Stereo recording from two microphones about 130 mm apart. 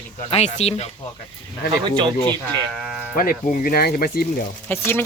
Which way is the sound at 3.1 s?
90° left.